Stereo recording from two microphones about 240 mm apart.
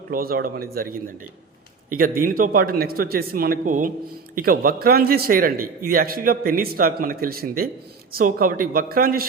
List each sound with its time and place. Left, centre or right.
0.1 s a man's voice: right